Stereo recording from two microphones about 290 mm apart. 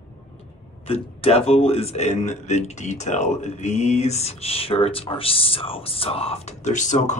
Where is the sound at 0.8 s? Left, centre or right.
Centre.